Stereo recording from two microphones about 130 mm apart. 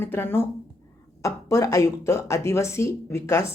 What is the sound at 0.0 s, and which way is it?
A woman's voice, 15° left (ahead or behind).